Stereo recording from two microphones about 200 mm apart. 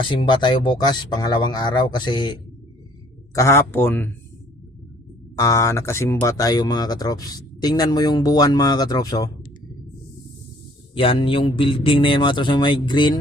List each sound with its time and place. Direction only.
0.1 s speech: 25° left (ahead or behind)
3.3 s speech: 15° left (ahead or behind)
5.4 s speech: 15° left (ahead or behind)
10.9 s speech: 25° left (ahead or behind)